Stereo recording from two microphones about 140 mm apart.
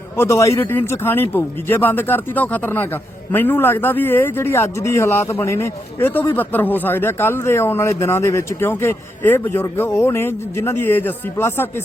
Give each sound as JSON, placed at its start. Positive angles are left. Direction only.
{"t": 0.2, "sound": "speech", "side_deg": 20}